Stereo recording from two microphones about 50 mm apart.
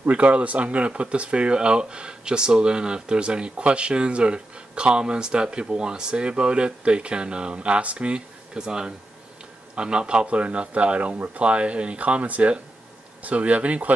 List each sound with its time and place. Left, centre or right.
0.0 s speech: right
8.5 s speech: centre